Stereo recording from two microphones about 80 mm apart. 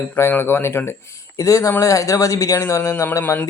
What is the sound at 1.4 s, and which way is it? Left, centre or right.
Speech, left.